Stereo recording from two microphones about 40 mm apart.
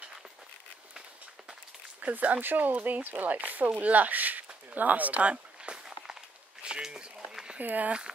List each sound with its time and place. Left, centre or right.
2.0 s speech: right
4.6 s a sound: right
6.6 s speech: right
7.5 s speech: right